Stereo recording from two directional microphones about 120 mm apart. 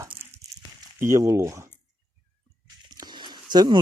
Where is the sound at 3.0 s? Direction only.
35° right (ahead or behind).